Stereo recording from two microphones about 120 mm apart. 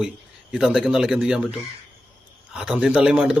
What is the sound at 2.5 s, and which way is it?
Speech, 5° right (ahead or behind).